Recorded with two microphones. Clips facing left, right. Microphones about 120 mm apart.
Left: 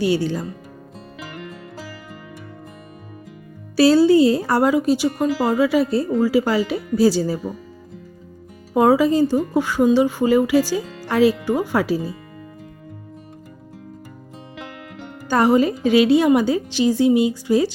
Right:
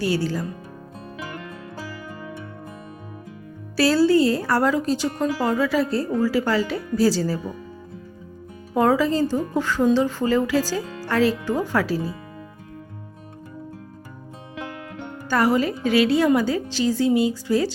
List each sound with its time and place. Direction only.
0.0 s speech: 20° left (ahead or behind)
3.8 s a woman's voice: 20° left (ahead or behind)
8.7 s a woman's voice: 15° left (ahead or behind)
15.3 s a woman's voice: 20° left (ahead or behind)